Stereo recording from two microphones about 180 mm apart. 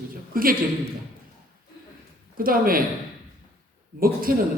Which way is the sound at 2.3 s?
55° right (ahead or behind).